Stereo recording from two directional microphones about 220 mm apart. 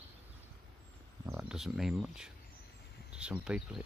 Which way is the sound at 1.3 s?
5° right (ahead or behind).